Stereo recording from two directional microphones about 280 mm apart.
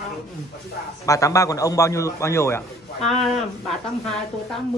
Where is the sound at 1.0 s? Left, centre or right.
Centre.